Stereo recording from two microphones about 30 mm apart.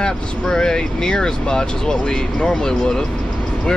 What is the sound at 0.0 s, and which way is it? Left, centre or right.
Speech, left.